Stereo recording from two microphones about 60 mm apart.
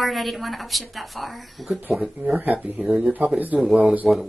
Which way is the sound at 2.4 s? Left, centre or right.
Right.